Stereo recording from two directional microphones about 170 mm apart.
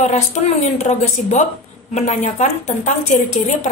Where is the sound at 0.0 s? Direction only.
40° left (ahead or behind).